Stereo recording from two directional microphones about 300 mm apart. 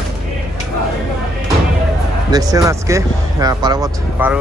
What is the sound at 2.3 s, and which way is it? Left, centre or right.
Speech, centre.